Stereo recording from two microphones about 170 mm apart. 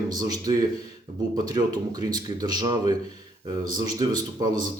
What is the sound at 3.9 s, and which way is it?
Speech, 25° right (ahead or behind).